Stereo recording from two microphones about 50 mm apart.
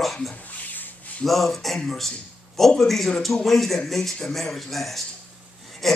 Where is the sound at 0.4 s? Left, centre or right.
Left.